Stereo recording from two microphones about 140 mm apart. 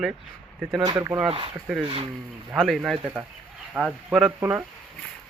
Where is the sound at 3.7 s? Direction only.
10° right (ahead or behind).